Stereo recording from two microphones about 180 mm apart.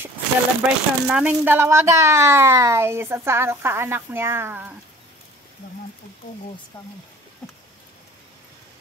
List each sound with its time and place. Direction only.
0.6 s speech: 5° right (ahead or behind)